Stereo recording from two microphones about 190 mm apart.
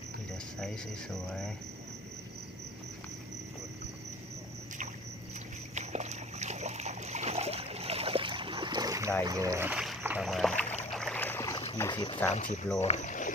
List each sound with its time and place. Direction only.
1.1 s speech: centre (ahead or behind)
5.7 s splash: 35° right (ahead or behind); by 9.1 s 15° right (ahead or behind)
9.2 s speech: 20° right (ahead or behind); by 10.5 s centre (ahead or behind)
10.9 s boat: 5° left (ahead or behind)
11.8 s speech: 20° left (ahead or behind)
12.3 s speech: 40° left (ahead or behind)